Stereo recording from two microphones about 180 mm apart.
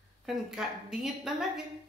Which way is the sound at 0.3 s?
5° right (ahead or behind).